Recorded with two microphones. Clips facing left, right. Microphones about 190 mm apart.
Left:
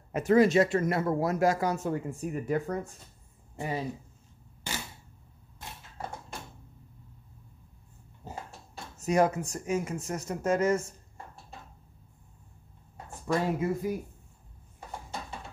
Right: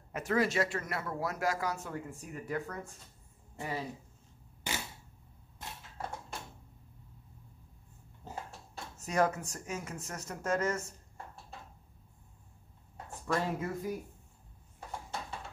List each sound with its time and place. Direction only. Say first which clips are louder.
0.1 s speech: left 9 dB; 20° left (ahead or behind)
8.9 s speech: left 5 dB; 15° left (ahead or behind)
13.3 s speech: left 5 dB; 10° left (ahead or behind)